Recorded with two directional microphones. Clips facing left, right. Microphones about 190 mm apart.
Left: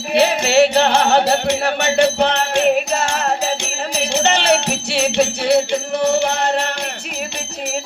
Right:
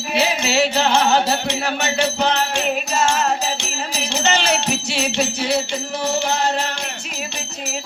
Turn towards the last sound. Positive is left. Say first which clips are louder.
# left 3 dB
turn(degrees=60)  # may be behind; listen again after turning